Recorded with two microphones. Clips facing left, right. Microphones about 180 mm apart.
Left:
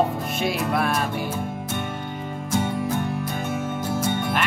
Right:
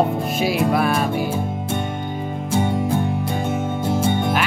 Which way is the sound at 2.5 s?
30° right (ahead or behind).